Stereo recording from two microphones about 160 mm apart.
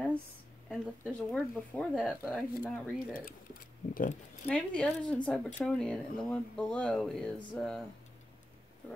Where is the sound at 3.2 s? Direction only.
60° left (ahead or behind).